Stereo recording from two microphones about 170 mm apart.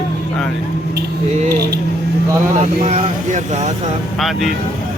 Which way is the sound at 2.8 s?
40° right (ahead or behind).